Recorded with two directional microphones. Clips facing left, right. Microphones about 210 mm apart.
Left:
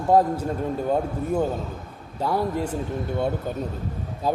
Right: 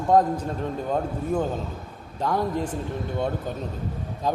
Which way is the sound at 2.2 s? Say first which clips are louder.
Left 1 dB; 10° left (ahead or behind).